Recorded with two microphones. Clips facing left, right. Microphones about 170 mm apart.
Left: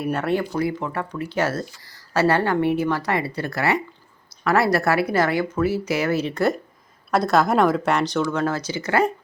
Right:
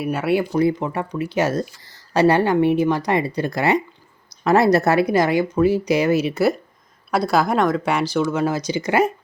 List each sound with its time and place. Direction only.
0.0 s a woman's voice: 5° right (ahead or behind)
0.5 s a woman's voice: 20° right (ahead or behind)